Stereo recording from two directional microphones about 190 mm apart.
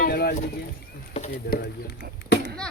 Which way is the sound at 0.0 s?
55° left (ahead or behind).